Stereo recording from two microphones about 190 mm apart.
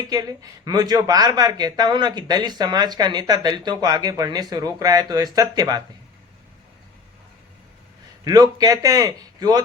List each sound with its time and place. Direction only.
0.1 s speech: 20° right (ahead or behind)
8.2 s speech: 20° right (ahead or behind)